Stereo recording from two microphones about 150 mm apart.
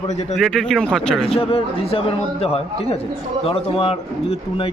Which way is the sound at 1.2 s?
40° left (ahead or behind).